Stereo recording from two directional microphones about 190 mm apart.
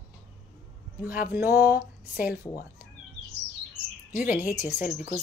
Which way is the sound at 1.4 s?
50° left (ahead or behind).